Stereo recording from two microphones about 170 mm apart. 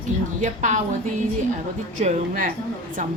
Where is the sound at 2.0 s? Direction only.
45° right (ahead or behind).